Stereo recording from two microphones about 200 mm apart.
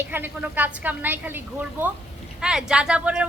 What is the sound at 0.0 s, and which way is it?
A woman's voice, 10° right (ahead or behind).